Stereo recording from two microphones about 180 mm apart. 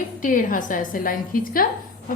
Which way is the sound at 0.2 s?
50° left (ahead or behind).